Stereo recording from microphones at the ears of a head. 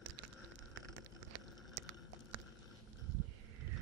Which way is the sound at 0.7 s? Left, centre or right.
Right.